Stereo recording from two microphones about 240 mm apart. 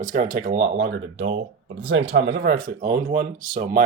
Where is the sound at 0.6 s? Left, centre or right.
Right.